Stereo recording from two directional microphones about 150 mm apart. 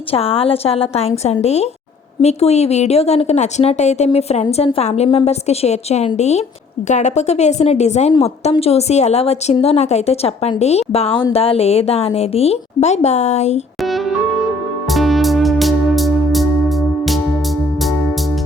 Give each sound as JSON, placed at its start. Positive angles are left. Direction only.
{"t": 0.1, "sound": "a woman's voice", "side_deg": 40}
{"t": 13.8, "sound": "music", "side_deg": 0}